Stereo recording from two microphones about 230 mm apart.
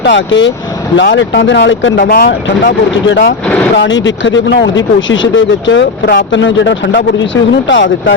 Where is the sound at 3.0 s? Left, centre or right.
Left.